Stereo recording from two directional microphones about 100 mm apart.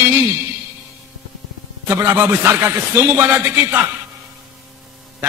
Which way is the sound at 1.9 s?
25° right (ahead or behind).